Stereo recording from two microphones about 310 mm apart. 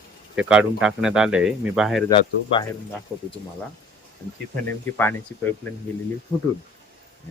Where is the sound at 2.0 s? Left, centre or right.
Centre.